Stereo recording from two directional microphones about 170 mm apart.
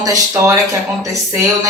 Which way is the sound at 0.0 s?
20° right (ahead or behind).